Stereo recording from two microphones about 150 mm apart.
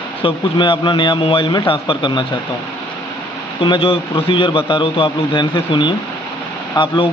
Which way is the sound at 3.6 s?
35° left (ahead or behind).